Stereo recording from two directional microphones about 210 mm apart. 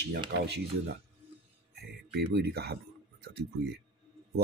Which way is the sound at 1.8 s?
50° right (ahead or behind).